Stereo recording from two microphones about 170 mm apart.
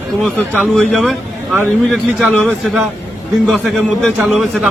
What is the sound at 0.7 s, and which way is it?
A man's voice, centre (ahead or behind).